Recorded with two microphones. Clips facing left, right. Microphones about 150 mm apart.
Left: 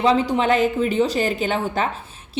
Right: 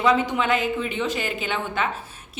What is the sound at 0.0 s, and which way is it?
A woman's voice, 35° left (ahead or behind).